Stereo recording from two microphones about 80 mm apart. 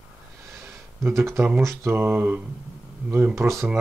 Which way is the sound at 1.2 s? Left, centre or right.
Right.